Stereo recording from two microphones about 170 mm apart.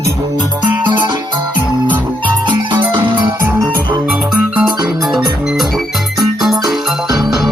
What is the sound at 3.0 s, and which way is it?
Music, 20° right (ahead or behind).